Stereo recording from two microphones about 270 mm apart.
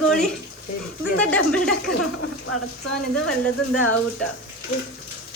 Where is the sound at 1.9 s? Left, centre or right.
Left.